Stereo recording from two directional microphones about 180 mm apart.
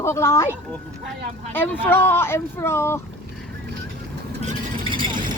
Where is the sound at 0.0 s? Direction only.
15° left (ahead or behind).